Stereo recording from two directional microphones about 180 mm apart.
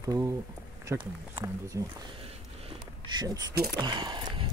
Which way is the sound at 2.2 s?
30° right (ahead or behind).